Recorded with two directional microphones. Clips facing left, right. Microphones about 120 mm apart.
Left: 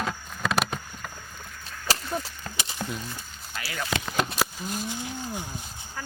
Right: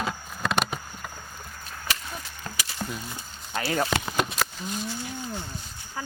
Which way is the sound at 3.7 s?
35° right (ahead or behind).